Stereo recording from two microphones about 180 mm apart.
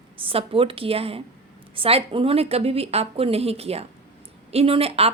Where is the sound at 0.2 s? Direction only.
30° right (ahead or behind).